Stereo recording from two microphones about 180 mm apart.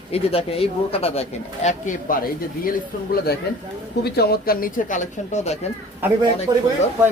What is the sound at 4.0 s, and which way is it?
Speech, 60° left (ahead or behind).